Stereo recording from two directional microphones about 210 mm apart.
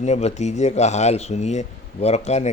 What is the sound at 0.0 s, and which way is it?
Speech, 30° left (ahead or behind).